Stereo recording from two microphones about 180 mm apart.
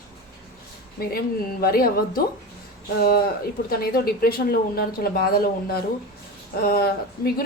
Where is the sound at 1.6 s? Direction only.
55° left (ahead or behind).